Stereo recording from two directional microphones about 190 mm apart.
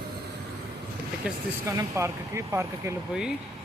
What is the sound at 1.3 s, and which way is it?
Speech, 5° right (ahead or behind).